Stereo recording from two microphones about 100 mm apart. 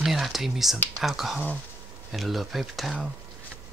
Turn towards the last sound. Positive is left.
turn(degrees=-5)  # may be behind; listen again after turning